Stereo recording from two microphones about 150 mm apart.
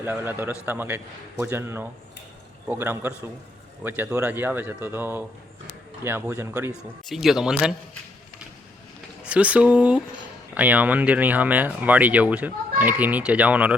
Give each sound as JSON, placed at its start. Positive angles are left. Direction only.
{"t": 0.0, "sound": "speech", "side_deg": -15}
{"t": 7.1, "sound": "speech", "side_deg": 0}
{"t": 9.2, "sound": "speech", "side_deg": -10}